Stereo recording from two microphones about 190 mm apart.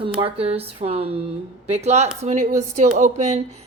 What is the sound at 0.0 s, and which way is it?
A woman's voice, 30° right (ahead or behind).